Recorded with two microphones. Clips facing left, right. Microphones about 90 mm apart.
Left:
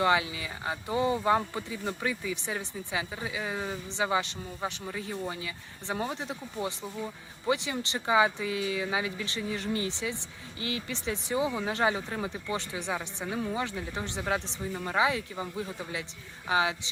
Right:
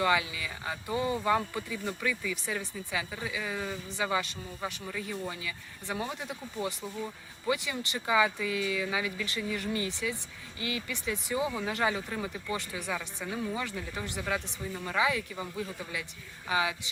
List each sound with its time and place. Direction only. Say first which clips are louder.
0.0 s speech: left 2 dB; 30° left (ahead or behind)